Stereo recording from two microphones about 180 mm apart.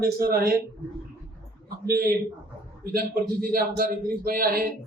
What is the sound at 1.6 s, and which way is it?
A man's voice, 55° right (ahead or behind).